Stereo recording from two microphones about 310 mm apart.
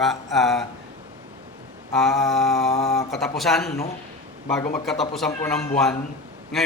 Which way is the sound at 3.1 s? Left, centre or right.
Centre.